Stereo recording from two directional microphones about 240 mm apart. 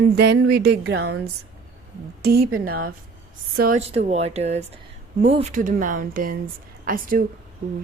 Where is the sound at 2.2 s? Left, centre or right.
Right.